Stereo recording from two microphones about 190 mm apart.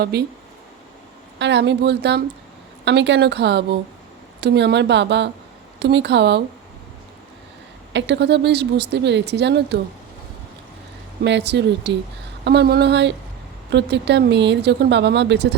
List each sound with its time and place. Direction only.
0.0 s speech: 55° right (ahead or behind)
1.4 s speech: 65° right (ahead or behind)
7.9 s speech: 65° right (ahead or behind)
11.2 s speech: 65° right (ahead or behind)